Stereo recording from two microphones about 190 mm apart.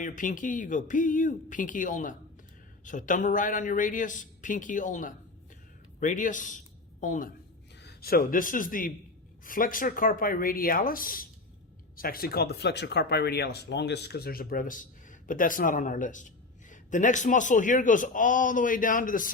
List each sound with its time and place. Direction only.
0.0 s speech: 45° left (ahead or behind)
7.8 s a man's voice: 55° left (ahead or behind)